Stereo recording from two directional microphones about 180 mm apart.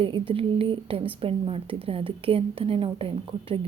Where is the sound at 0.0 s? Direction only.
30° right (ahead or behind).